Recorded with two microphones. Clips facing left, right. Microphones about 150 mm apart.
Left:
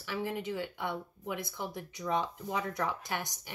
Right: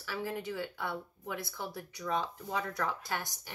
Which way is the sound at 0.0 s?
20° left (ahead or behind).